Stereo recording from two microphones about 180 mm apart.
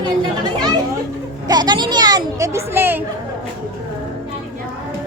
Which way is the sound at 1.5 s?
25° right (ahead or behind).